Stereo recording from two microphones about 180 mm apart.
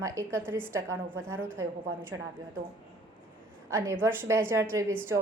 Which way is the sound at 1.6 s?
15° right (ahead or behind).